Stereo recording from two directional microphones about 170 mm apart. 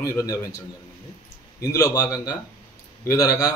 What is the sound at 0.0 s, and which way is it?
Speech, 20° left (ahead or behind).